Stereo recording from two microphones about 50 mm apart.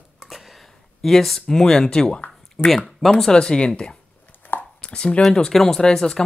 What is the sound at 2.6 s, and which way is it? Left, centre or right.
Speech, centre.